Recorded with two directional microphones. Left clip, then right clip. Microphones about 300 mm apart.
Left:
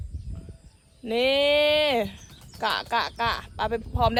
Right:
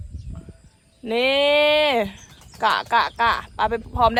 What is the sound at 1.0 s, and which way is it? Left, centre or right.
Speech, centre.